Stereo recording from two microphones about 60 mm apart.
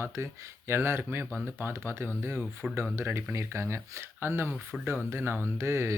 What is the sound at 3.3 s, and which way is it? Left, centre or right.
Speech, right.